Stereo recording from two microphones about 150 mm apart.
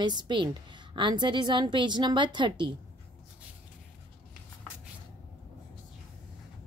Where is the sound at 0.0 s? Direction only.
30° right (ahead or behind).